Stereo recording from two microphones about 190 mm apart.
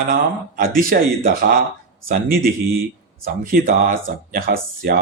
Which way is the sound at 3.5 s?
45° right (ahead or behind).